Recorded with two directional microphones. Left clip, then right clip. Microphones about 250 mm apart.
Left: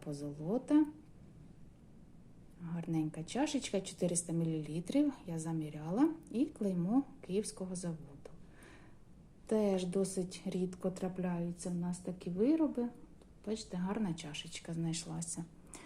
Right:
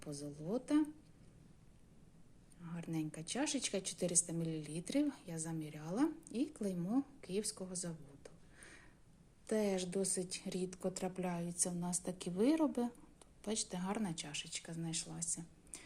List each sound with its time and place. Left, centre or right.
0.0 s a woman's voice: centre
2.6 s a woman's voice: centre